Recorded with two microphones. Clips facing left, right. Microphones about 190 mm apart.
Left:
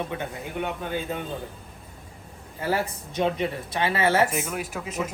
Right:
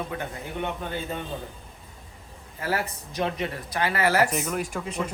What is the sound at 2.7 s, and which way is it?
Speech, 25° left (ahead or behind).